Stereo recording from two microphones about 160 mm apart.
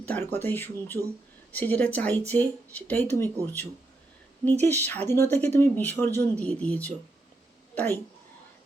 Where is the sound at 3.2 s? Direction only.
20° right (ahead or behind).